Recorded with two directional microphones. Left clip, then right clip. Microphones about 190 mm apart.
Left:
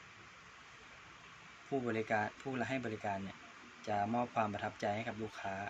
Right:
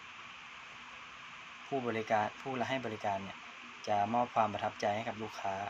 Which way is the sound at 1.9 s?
20° left (ahead or behind).